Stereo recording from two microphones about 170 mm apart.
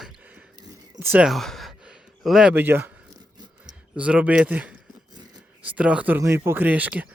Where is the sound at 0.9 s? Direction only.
15° right (ahead or behind).